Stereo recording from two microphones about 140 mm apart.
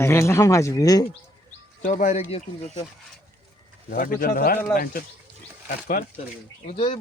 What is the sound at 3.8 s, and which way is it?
Speech, 85° left.